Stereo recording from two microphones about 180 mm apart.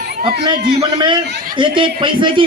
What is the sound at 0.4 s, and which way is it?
A man's voice, 25° right (ahead or behind).